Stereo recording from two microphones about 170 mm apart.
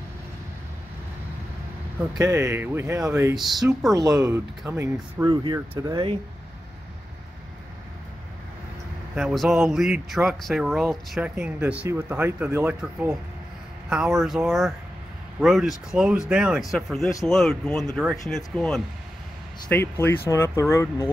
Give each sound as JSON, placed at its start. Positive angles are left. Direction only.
{"t": 2.1, "sound": "speech", "side_deg": -15}
{"t": 3.3, "sound": "speech", "side_deg": 0}
{"t": 3.9, "sound": "speech", "side_deg": -20}
{"t": 9.1, "sound": "speech", "side_deg": 0}